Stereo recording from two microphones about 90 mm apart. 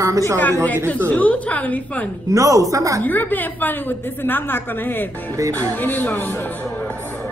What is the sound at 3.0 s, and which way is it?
A woman's voice, 20° left (ahead or behind).